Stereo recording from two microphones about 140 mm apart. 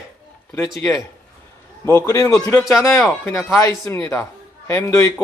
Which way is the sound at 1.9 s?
20° left (ahead or behind).